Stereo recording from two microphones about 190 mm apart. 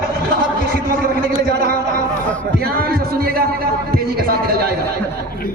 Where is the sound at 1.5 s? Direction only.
55° right (ahead or behind).